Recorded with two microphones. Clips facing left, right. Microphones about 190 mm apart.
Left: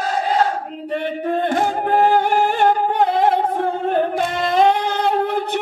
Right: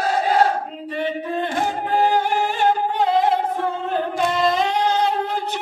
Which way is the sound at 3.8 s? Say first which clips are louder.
Left 3 dB; 55° left (ahead or behind).